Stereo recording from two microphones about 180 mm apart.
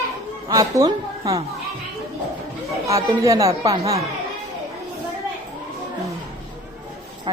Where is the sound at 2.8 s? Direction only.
15° right (ahead or behind).